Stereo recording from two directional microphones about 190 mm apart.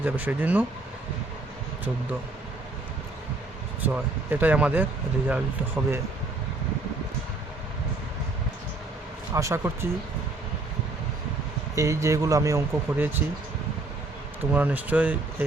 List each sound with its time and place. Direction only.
0.0 s speech: 10° right (ahead or behind)
3.8 s speech: 10° right (ahead or behind)
9.3 s speech: 15° right (ahead or behind)
11.7 s speech: 15° right (ahead or behind)
14.5 s speech: 10° right (ahead or behind)